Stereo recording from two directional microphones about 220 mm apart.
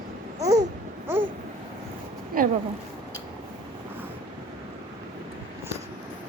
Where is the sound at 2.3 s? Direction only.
40° right (ahead or behind).